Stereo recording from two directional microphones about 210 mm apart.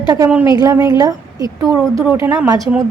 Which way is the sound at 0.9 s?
15° right (ahead or behind).